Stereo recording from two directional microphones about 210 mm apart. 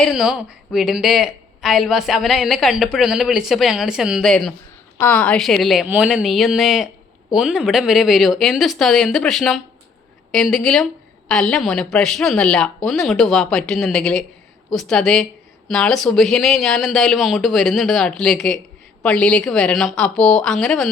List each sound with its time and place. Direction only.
0.0 s a woman's voice: centre (ahead or behind)